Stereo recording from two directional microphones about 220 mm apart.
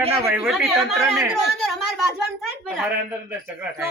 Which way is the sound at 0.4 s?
Centre (ahead or behind).